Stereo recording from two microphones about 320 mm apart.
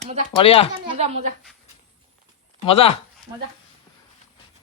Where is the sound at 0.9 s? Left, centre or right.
Centre.